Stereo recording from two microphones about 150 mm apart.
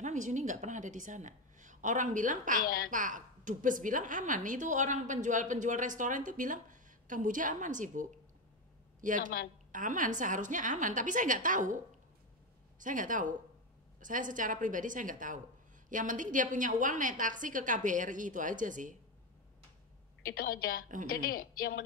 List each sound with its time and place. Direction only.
0.0 s a woman's voice: 55° right (ahead or behind)
2.6 s speech: 75° left (ahead or behind)
2.9 s a woman's voice: 60° right (ahead or behind)
20.2 s a woman's voice: 80° left